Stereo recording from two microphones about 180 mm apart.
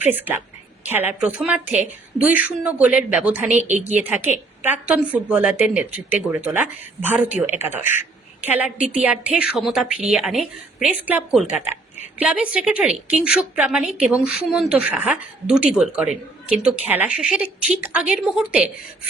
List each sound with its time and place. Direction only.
0.0 s a woman's voice: 10° right (ahead or behind)
2.6 s a woman's voice: 5° right (ahead or behind)
3.6 s a woman's voice: 40° right (ahead or behind)
4.0 s a woman's voice: 10° right (ahead or behind)